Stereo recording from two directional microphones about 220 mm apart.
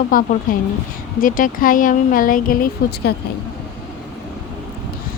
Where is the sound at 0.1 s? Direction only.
40° left (ahead or behind).